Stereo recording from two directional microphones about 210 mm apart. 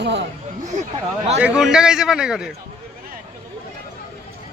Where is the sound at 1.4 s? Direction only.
5° right (ahead or behind).